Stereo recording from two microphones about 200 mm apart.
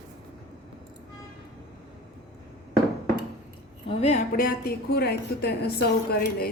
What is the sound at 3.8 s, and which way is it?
A woman's voice, 30° left (ahead or behind).